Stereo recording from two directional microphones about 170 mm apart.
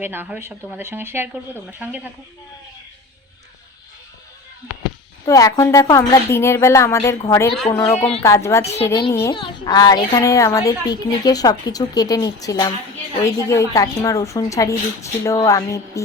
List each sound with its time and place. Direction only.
0.0 s speech: 10° right (ahead or behind)
5.2 s a woman's voice: 20° left (ahead or behind)
7.9 s a woman's voice: 35° left (ahead or behind)
8.8 s a woman's voice: 15° left (ahead or behind)